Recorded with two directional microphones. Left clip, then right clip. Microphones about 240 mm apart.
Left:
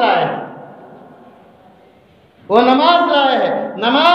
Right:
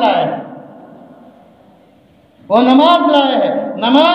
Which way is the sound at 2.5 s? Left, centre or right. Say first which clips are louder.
Right 1 dB; left.